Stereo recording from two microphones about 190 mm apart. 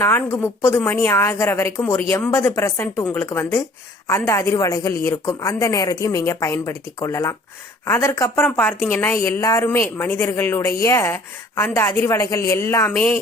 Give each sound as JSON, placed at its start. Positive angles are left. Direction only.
{"t": 0.0, "sound": "a woman's voice", "side_deg": 10}